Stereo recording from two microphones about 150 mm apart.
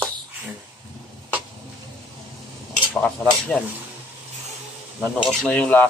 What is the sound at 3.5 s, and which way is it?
Speech, 10° left (ahead or behind).